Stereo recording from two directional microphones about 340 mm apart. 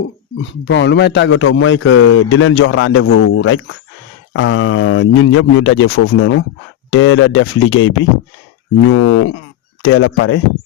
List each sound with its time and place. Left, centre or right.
0.6 s a man's voice: left
9.0 s a sound: left
9.9 s a man's voice: left